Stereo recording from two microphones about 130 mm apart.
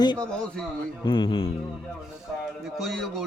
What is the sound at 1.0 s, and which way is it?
Speech, 40° left (ahead or behind).